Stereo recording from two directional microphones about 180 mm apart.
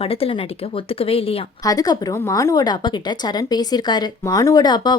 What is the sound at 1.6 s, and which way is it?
A woman's voice, 20° left (ahead or behind).